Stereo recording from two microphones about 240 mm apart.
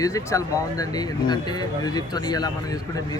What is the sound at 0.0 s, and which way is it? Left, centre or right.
Speech, centre.